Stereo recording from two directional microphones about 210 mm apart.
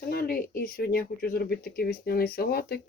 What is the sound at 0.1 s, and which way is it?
Speech, 45° left (ahead or behind).